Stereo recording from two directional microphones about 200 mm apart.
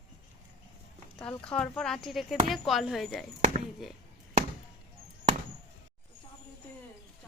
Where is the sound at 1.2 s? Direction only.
5° left (ahead or behind).